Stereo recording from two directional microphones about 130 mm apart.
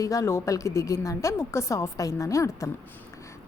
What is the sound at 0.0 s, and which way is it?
A woman's voice, 25° left (ahead or behind).